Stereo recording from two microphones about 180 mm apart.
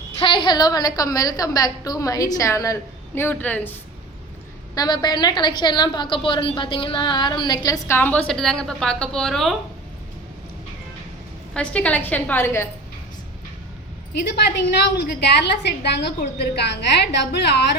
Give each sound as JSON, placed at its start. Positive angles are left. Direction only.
{"t": 0.2, "sound": "a woman's voice", "side_deg": 25}
{"t": 4.7, "sound": "a woman's voice", "side_deg": 20}
{"t": 11.5, "sound": "a woman's voice", "side_deg": 5}
{"t": 14.5, "sound": "a woman's voice", "side_deg": 70}